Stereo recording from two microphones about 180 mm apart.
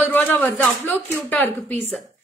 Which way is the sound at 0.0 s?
10° left (ahead or behind).